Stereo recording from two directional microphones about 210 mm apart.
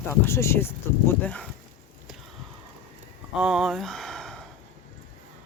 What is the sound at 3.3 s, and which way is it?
Speech, 5° right (ahead or behind).